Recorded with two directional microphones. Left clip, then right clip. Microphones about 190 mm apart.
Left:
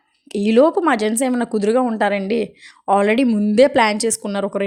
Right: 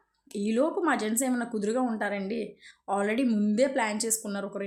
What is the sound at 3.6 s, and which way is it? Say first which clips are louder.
A woman's voice: left 14 dB; 40° left (ahead or behind).